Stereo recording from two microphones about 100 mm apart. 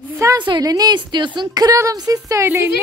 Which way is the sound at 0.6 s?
40° right (ahead or behind).